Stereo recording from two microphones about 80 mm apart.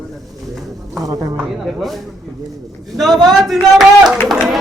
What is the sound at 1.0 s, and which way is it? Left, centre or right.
Speech, right.